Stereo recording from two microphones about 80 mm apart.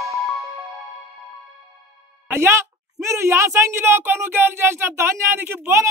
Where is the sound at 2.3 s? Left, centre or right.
Right.